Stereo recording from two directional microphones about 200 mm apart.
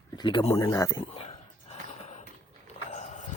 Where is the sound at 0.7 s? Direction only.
15° left (ahead or behind).